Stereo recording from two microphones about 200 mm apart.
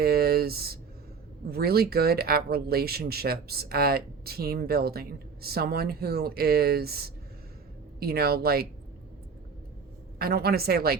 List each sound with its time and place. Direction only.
0.0 s speech: 50° right (ahead or behind)
10.2 s speech: 50° right (ahead or behind)